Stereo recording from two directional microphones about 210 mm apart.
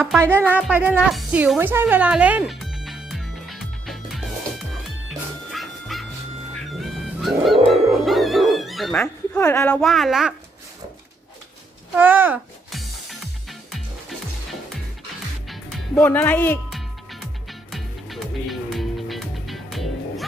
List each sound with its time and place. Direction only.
0.4 s music: 5° right (ahead or behind); by 9.7 s 10° left (ahead or behind)
9.7 s speech: centre (ahead or behind)
11.9 s music: 10° right (ahead or behind)
15.4 s music: 5° left (ahead or behind)